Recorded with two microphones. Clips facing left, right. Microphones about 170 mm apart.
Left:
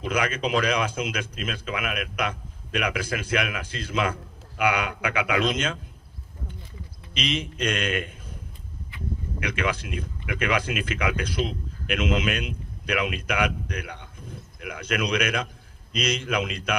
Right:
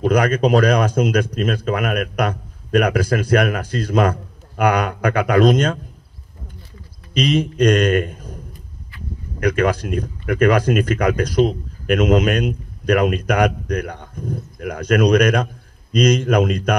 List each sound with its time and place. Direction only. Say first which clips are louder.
0.0 s speech: right 10 dB; 40° right (ahead or behind)
7.2 s a man's voice: right 12 dB; 40° right (ahead or behind)
9.4 s speech: right 11 dB; 40° right (ahead or behind)